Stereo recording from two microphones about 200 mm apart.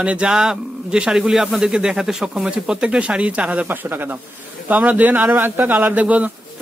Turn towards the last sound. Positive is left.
turn(degrees=-5)  # may be behind; listen again after turning